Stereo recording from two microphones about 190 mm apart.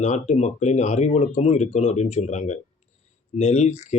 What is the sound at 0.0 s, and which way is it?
Speech, 35° left (ahead or behind).